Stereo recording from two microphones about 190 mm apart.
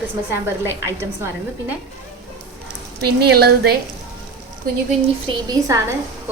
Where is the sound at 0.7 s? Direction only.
15° right (ahead or behind).